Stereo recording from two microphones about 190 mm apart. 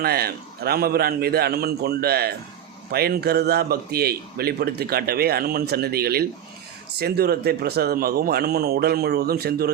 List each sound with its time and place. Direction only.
0.0 s a man's voice: 55° right (ahead or behind)